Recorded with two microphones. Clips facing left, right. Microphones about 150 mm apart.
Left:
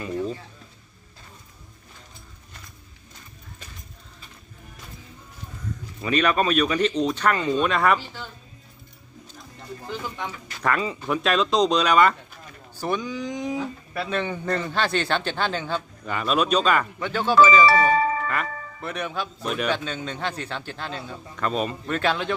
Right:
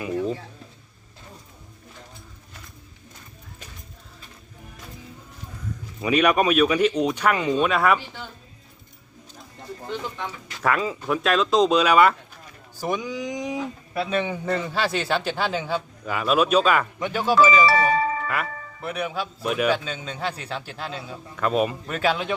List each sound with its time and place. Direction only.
6.0 s speech: 10° right (ahead or behind)
10.2 s speech: 5° right (ahead or behind)
17.7 s speech: 50° left (ahead or behind)
18.3 s speech: 10° right (ahead or behind)